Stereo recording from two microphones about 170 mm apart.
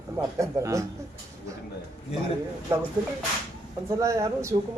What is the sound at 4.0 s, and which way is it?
Speech, 15° right (ahead or behind).